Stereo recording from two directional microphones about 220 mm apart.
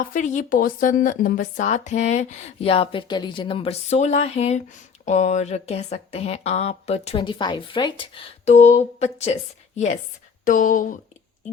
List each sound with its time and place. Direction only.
0.0 s speech: 35° left (ahead or behind)